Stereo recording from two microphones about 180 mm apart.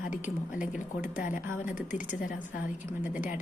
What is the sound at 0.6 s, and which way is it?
Speech, 45° left (ahead or behind).